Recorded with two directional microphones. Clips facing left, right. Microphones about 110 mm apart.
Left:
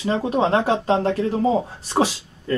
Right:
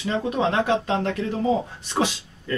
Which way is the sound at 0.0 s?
35° left (ahead or behind).